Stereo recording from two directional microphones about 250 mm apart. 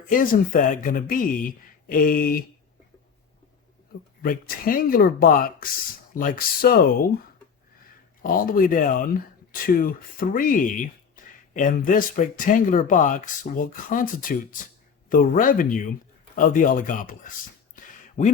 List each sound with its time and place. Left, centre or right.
0.1 s speech: left
4.2 s speech: left
8.2 s speech: left